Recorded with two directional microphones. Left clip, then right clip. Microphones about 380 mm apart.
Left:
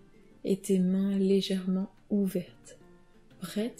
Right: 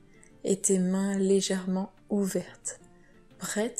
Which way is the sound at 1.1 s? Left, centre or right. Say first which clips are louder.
Right 3 dB; centre.